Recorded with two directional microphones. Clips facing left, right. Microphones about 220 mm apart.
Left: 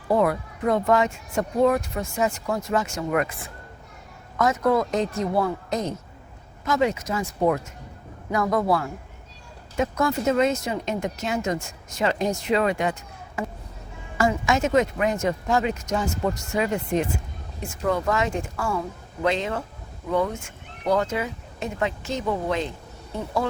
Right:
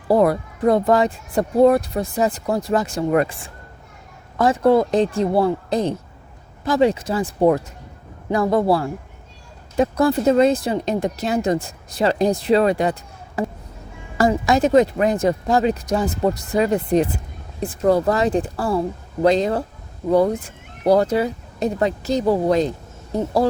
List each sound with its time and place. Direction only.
0.1 s speech: 35° right (ahead or behind)